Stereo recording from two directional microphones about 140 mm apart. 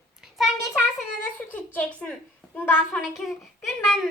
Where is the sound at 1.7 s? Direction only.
5° left (ahead or behind).